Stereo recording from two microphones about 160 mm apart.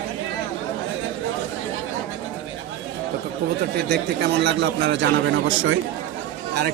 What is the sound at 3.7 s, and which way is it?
Speech, 90° right.